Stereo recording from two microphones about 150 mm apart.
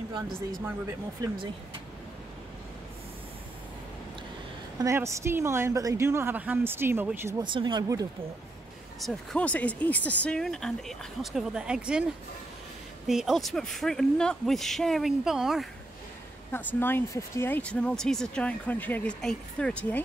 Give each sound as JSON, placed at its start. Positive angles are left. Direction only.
{"t": 4.7, "sound": "speech", "side_deg": -20}
{"t": 7.4, "sound": "speech", "side_deg": -30}
{"t": 9.0, "sound": "speech", "side_deg": 5}
{"t": 13.0, "sound": "speech", "side_deg": -5}
{"t": 16.5, "sound": "speech", "side_deg": 15}